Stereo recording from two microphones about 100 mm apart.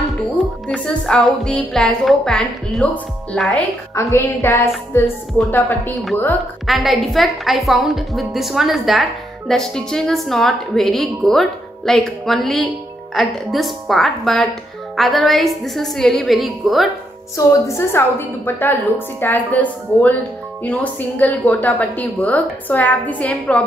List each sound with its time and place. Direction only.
0.4 s a woman's voice: 5° left (ahead or behind)
3.9 s a woman's voice: 30° left (ahead or behind)
6.6 s a woman's voice: centre (ahead or behind)
17.5 s a woman's voice: 30° left (ahead or behind)